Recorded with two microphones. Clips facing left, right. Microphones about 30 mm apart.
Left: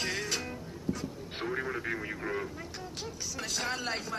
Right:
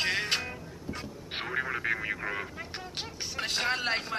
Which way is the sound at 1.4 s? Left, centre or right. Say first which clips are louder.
Right 2 dB; right.